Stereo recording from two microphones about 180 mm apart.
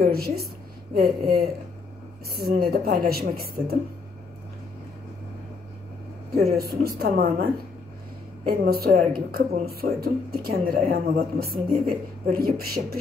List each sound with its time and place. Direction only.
0.0 s speech: 60° right (ahead or behind)
6.5 s speech: 60° right (ahead or behind)
8.5 s speech: 55° right (ahead or behind)